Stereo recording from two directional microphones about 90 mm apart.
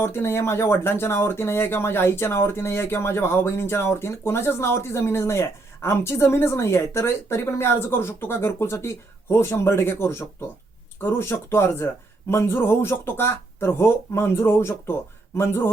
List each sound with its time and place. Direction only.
0.0 s speech: 30° left (ahead or behind)